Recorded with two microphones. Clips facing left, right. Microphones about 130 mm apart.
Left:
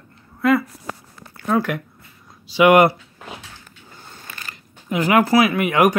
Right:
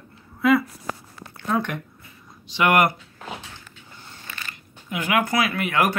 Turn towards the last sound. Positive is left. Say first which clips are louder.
# left 6 dB
turn(degrees=15)  # may be behind; listen again after turning